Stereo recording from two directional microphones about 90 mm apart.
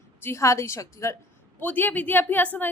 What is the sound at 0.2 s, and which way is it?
Speech, 30° left (ahead or behind).